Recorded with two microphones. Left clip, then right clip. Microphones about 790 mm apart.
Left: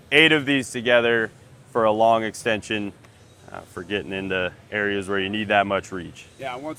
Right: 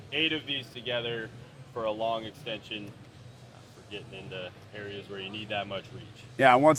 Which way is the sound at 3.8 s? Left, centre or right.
Left.